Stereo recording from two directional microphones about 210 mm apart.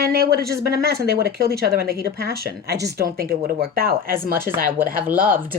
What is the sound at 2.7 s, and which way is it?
Speech, 15° right (ahead or behind).